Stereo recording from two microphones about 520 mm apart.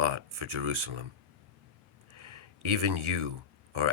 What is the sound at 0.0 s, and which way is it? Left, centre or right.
Speech, right.